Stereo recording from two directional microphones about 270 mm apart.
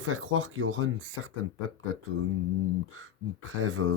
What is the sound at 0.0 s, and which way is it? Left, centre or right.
Speech, right.